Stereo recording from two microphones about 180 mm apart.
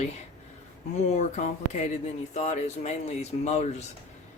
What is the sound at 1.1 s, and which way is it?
Speech, 40° left (ahead or behind).